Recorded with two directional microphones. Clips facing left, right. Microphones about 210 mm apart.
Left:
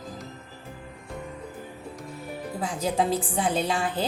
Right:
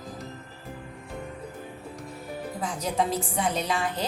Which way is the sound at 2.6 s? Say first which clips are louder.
Left 2 dB; 30° left (ahead or behind).